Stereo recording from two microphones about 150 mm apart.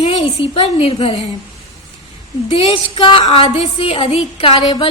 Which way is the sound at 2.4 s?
40° left (ahead or behind).